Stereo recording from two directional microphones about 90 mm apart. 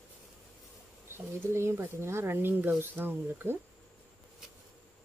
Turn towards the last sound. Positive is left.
turn(degrees=-25)  # may be behind; listen again after turning